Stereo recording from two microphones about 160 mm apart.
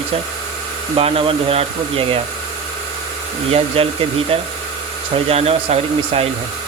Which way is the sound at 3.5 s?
40° right (ahead or behind).